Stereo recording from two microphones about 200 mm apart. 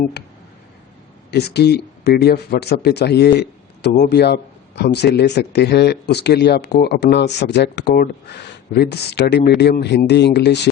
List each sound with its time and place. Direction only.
1.3 s speech: 55° left (ahead or behind)